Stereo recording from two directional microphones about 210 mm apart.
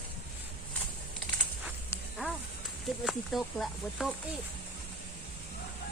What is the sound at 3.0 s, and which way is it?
Speech, centre (ahead or behind).